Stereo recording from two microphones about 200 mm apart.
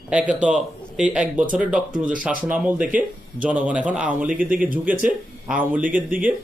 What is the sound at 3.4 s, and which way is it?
Speech, 5° right (ahead or behind).